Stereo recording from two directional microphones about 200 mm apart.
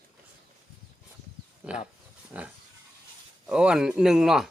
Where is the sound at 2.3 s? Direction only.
5° right (ahead or behind).